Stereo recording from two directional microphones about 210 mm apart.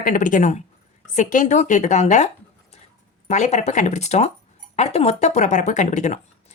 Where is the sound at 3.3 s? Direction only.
35° left (ahead or behind).